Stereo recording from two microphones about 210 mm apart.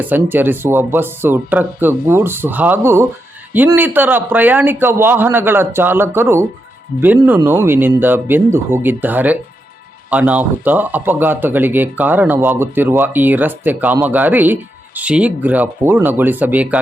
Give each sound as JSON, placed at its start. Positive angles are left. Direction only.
{"t": 0.0, "sound": "speech", "side_deg": -10}